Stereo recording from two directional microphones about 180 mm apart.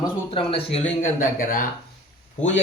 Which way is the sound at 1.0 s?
45° left (ahead or behind).